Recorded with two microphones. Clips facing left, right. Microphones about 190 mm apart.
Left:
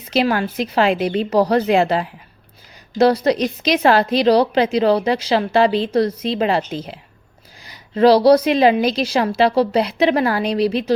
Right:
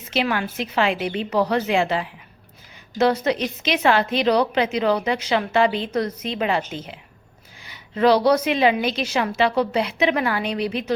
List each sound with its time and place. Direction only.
0.1 s a woman's voice: 40° left (ahead or behind)